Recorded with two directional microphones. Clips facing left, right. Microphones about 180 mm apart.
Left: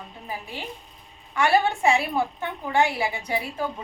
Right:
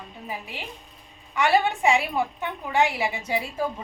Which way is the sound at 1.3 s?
20° right (ahead or behind).